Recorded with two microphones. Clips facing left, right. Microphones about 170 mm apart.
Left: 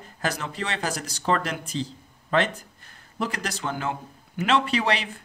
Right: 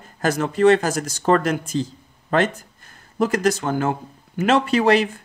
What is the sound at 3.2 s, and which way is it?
Speech, 45° right (ahead or behind).